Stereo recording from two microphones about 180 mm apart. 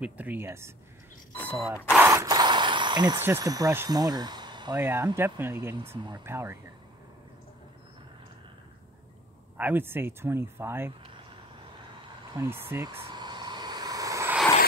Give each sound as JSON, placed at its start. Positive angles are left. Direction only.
{"t": 0.0, "sound": "speech", "side_deg": -10}
{"t": 2.0, "sound": "mechanisms", "side_deg": -15}
{"t": 3.2, "sound": "speech", "side_deg": -15}
{"t": 4.7, "sound": "speech", "side_deg": -10}
{"t": 9.6, "sound": "speech", "side_deg": -10}
{"t": 12.4, "sound": "vehicle", "side_deg": -10}